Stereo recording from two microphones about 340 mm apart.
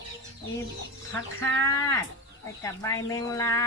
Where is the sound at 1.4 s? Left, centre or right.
Centre.